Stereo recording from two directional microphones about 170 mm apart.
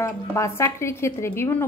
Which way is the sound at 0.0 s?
15° left (ahead or behind).